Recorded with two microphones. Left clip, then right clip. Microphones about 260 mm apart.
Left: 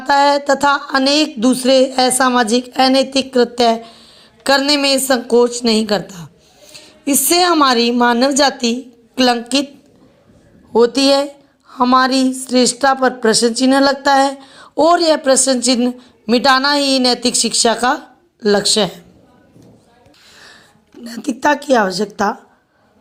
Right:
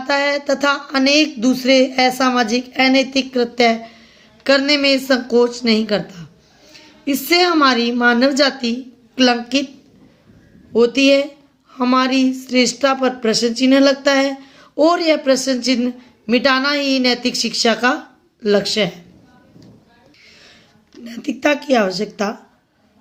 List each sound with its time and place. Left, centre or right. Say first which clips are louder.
0.0 s speech: left 5 dB; left
4.0 s a sound: left 1 dB; left
5.0 s speech: left 2 dB; centre
6.7 s a sound: left 3 dB; centre
7.3 s speech: left 1 dB; centre
10.7 s speech: left 1 dB; centre
17.3 s speech: left 4 dB; centre
17.6 s speech: left 1 dB; left
20.2 s music: left 4 dB; centre
21.0 s a woman's voice: left 2 dB; centre